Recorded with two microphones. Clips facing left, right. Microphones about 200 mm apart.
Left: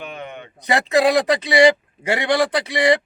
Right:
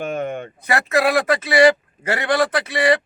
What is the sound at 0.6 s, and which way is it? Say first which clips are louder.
Speech: left 2 dB; 15° left (ahead or behind).